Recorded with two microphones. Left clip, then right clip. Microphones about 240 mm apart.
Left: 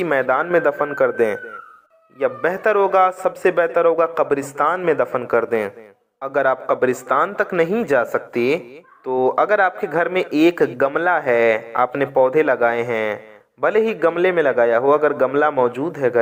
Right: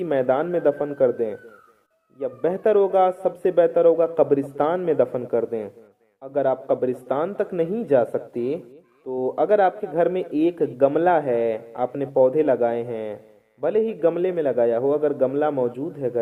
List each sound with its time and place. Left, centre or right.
0.0 s a man's voice: centre
9.0 s speech: left
9.3 s a man's voice: centre